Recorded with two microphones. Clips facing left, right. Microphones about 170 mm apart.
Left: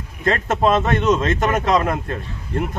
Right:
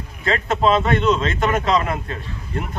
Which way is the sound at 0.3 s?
45° left (ahead or behind).